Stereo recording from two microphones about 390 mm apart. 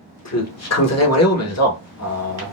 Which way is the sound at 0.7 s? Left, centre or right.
Left.